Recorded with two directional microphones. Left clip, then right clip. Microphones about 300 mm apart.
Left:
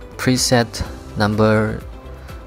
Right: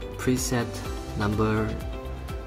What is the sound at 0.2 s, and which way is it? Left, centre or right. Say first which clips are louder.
Speech: left 11 dB; left.